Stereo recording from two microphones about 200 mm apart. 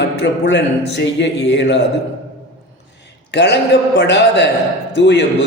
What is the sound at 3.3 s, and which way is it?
A man's voice, 60° left (ahead or behind).